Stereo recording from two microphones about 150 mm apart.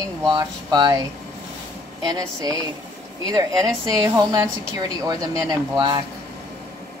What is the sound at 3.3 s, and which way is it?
A woman's voice, 20° right (ahead or behind).